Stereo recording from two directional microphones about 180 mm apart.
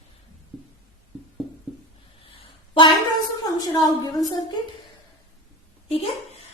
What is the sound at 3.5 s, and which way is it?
Speech, 20° left (ahead or behind).